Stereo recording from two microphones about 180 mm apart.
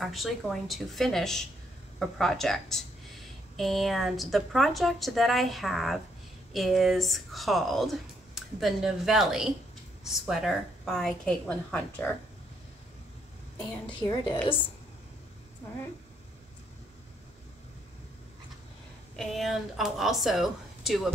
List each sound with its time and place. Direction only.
0.0 s speech: centre (ahead or behind)
13.8 s a woman's voice: 25° left (ahead or behind)
19.1 s speech: centre (ahead or behind)